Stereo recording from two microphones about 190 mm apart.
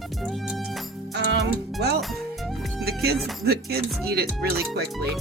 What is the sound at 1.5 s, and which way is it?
Speech, 60° right (ahead or behind).